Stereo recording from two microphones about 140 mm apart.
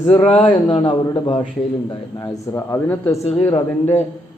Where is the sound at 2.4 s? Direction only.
20° left (ahead or behind).